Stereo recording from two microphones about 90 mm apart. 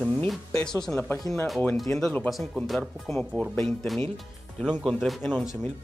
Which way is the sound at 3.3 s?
20° left (ahead or behind).